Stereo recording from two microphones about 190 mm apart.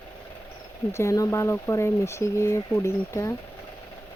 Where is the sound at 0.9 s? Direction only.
15° left (ahead or behind).